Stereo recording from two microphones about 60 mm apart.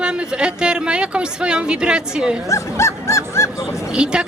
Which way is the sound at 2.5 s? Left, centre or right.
Left.